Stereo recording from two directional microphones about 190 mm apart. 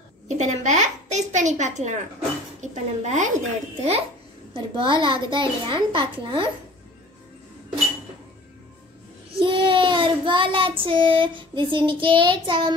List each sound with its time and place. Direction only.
0.4 s a sound: 40° right (ahead or behind)
2.6 s a child's voice: 40° right (ahead or behind)
4.6 s a child's voice: 25° right (ahead or behind)
9.4 s child singing: 25° right (ahead or behind)
10.8 s a child's voice: 25° right (ahead or behind)